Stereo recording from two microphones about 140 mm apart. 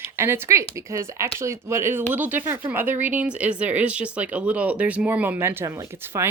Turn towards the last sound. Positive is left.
turn(degrees=-20)  # may be behind; listen again after turning